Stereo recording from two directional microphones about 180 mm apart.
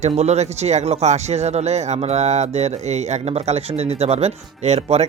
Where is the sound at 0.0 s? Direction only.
35° right (ahead or behind).